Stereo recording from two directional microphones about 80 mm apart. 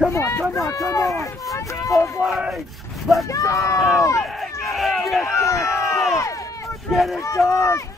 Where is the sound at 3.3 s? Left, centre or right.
Left.